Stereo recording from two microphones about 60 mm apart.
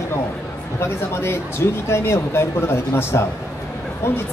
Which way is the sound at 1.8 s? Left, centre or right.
Left.